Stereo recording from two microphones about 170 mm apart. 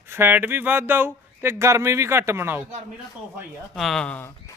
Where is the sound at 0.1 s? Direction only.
15° right (ahead or behind).